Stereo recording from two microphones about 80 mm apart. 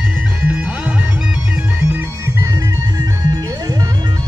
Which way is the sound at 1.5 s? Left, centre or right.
Right.